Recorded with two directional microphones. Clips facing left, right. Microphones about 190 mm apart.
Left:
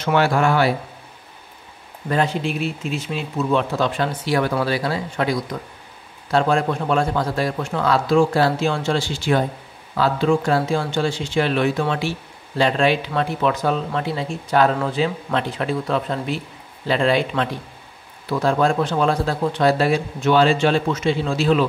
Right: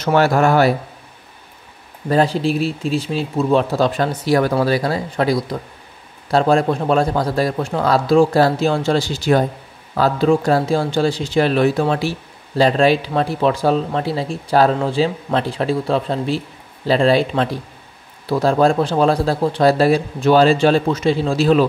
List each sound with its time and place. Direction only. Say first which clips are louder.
0.0 s speech: right 3 dB; 40° right (ahead or behind)
2.0 s speech: right 5 dB; 35° right (ahead or behind)